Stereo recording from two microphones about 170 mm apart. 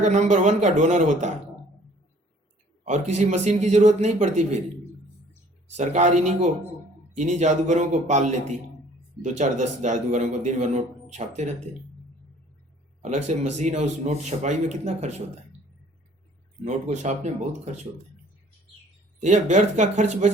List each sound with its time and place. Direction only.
0.0 s a man's voice: 45° right (ahead or behind)
2.8 s a man's voice: 45° right (ahead or behind)
5.7 s a man's voice: 45° right (ahead or behind)
13.0 s a man's voice: 40° right (ahead or behind)
16.6 s a man's voice: 45° right (ahead or behind)
19.2 s a man's voice: 45° right (ahead or behind)